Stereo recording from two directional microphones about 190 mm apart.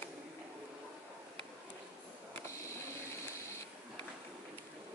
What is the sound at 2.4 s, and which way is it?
Vehicle, 15° left (ahead or behind).